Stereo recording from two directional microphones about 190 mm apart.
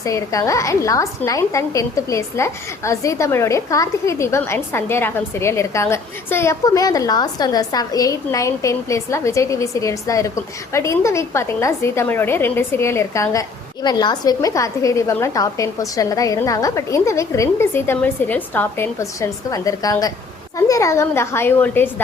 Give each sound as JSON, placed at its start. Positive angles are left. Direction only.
{"t": 0.0, "sound": "a woman's voice", "side_deg": 15}